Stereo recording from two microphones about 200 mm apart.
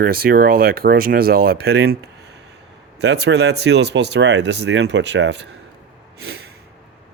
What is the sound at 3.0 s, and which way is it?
Speech, 60° right (ahead or behind).